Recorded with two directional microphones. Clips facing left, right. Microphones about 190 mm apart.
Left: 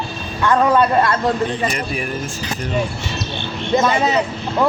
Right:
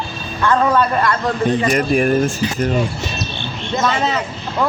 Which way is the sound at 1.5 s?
50° right (ahead or behind).